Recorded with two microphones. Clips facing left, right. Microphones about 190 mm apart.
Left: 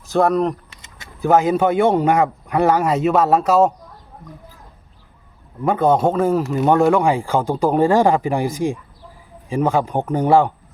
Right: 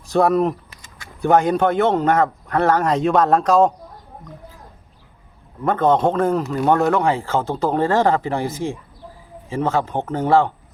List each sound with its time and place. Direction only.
0.0 s speech: centre (ahead or behind)
0.7 s a sound: 25° left (ahead or behind)
1.2 s a man's voice: 5° left (ahead or behind)
5.6 s a man's voice: 10° left (ahead or behind)